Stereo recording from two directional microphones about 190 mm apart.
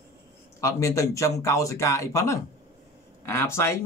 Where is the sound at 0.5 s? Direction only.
15° left (ahead or behind).